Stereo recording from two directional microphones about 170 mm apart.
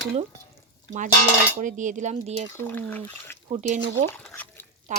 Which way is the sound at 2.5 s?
10° left (ahead or behind).